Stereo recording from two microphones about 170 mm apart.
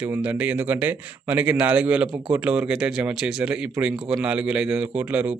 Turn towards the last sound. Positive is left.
turn(degrees=-5)  # may be behind; listen again after turning